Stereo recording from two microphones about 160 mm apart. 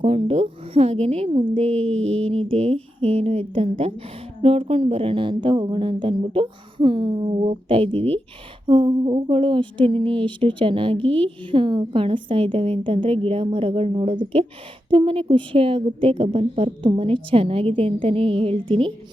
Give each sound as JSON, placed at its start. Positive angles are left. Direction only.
{"t": 0.0, "sound": "a woman's voice", "side_deg": -35}